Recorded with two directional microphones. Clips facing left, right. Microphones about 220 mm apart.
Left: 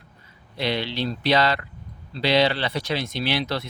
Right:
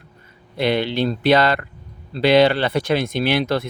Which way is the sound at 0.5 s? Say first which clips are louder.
Right 7 dB; 55° right (ahead or behind).